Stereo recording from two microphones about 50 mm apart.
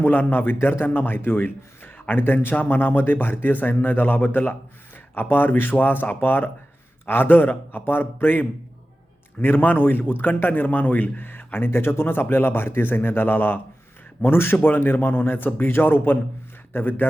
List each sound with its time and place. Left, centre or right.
0.0 s a man's voice: left